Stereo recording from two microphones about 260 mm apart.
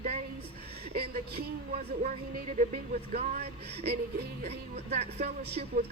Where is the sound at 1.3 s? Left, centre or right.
Right.